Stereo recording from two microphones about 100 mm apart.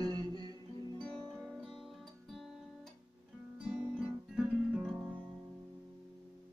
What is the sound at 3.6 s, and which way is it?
Guitar, 10° right (ahead or behind).